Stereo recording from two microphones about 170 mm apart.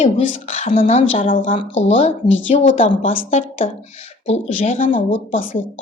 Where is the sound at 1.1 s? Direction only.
55° left (ahead or behind).